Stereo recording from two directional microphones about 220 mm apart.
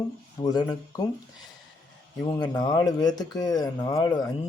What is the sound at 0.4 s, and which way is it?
Speech, 15° left (ahead or behind).